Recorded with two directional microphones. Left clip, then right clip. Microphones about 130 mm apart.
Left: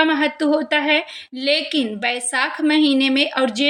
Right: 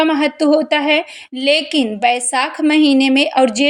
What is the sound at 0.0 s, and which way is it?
Speech, 25° right (ahead or behind).